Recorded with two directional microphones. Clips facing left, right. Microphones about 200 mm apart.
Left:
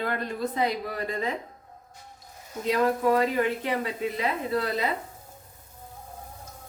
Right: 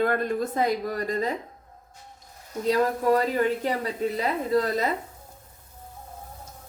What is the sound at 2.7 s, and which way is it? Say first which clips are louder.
Speech: right 1 dB; 40° right (ahead or behind).